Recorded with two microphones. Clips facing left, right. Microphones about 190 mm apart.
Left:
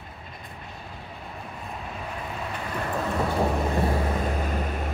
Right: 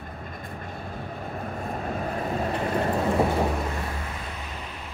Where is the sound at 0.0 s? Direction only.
50° right (ahead or behind); by 2.9 s 35° right (ahead or behind).